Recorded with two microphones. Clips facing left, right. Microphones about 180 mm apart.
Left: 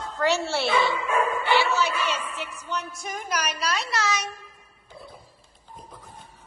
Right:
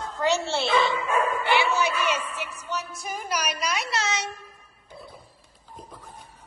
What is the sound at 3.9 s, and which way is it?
Speech, 25° right (ahead or behind).